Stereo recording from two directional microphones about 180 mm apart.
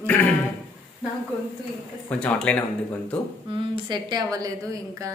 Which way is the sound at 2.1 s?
5° left (ahead or behind).